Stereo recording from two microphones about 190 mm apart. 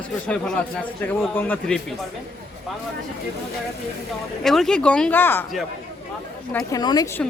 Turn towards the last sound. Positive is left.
turn(degrees=20)  # may be behind; listen again after turning